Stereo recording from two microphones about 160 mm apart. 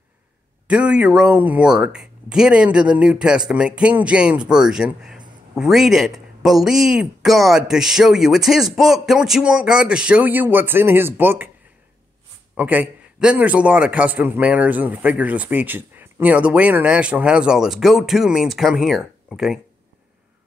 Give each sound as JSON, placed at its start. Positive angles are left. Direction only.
{"t": 0.7, "sound": "speech", "side_deg": -5}
{"t": 12.5, "sound": "a man's voice", "side_deg": -10}